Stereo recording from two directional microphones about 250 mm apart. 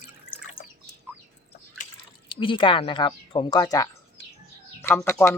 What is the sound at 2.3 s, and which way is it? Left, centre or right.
Speech, centre.